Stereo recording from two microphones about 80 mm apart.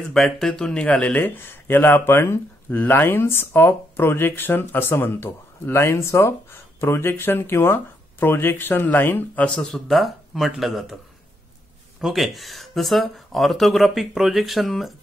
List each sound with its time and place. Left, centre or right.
0.1 s speech: centre; by 9.5 s left
9.5 s speech: centre
12.0 s speech: centre